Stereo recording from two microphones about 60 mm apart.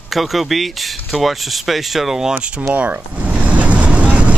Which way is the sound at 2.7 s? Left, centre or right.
Right.